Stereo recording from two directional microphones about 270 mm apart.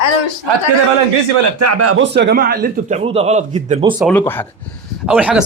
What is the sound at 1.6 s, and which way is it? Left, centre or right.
Speech, right.